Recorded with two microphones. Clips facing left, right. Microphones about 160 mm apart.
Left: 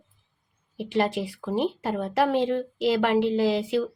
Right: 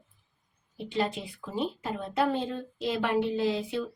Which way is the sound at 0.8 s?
75° left (ahead or behind).